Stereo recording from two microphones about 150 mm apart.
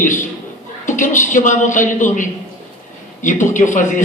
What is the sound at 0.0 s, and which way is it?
A man's voice, 55° left (ahead or behind).